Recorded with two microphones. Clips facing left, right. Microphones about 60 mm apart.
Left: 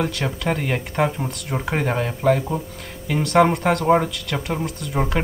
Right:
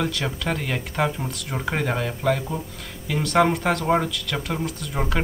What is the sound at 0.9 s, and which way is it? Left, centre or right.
Speech, centre.